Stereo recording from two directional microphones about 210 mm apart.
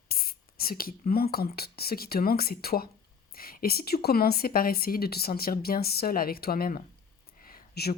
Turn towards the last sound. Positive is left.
turn(degrees=50)  # may be behind; listen again after turning